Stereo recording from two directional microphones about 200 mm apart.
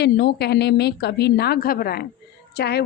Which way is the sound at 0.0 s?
55° left (ahead or behind).